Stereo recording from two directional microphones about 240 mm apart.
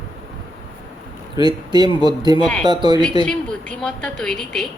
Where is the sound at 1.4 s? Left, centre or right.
Centre.